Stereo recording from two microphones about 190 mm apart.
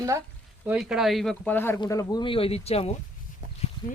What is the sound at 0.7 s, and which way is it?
Speech, 5° right (ahead or behind).